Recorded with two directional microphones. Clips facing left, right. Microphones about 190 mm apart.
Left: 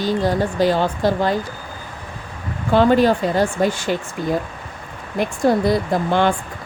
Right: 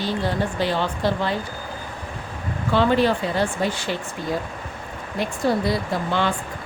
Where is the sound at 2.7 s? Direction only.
45° left (ahead or behind).